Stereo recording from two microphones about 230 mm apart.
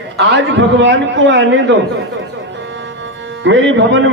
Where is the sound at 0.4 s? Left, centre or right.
Right.